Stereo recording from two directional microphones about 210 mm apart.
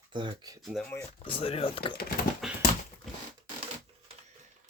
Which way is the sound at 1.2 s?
25° left (ahead or behind).